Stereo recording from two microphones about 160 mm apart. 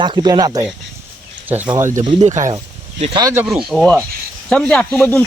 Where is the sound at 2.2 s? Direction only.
45° right (ahead or behind).